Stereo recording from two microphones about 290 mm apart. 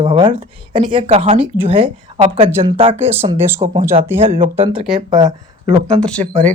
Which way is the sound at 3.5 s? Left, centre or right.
Centre.